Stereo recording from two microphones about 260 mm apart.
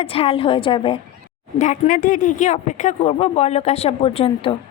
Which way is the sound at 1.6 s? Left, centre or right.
Left.